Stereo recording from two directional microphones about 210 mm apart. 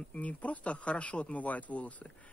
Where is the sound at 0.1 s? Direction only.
5° left (ahead or behind).